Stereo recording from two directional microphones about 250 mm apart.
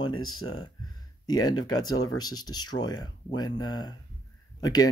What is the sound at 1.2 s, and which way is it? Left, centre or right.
Speech, centre.